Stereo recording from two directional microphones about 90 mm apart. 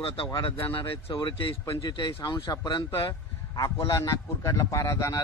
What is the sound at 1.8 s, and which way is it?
Speech, 55° left (ahead or behind).